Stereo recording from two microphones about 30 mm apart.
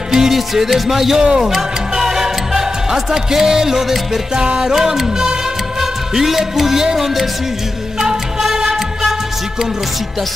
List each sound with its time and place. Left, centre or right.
0.1 s music: centre
1.2 s music: right
4.4 s music: right
4.7 s music: centre
8.0 s music: centre